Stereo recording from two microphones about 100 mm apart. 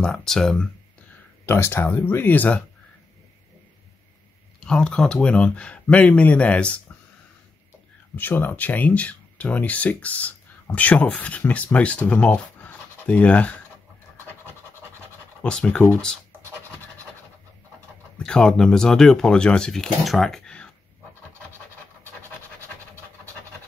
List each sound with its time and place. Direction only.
0.0 s speech: 5° left (ahead or behind)
1.4 s speech: 25° left (ahead or behind)
4.6 s speech: 10° left (ahead or behind)
8.2 s speech: 20° left (ahead or behind)
15.4 s speech: 10° left (ahead or behind)
18.1 s speech: 5° left (ahead or behind)